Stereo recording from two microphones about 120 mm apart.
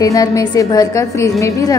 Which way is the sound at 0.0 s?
30° left (ahead or behind).